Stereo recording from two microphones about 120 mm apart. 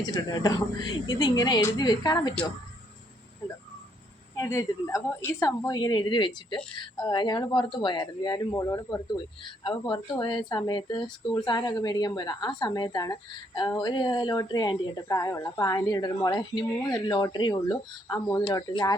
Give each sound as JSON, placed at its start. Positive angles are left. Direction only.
{"t": 0.1, "sound": "a woman's voice", "side_deg": 35}
{"t": 4.4, "sound": "a woman's voice", "side_deg": 25}
{"t": 9.4, "sound": "a woman's voice", "side_deg": 40}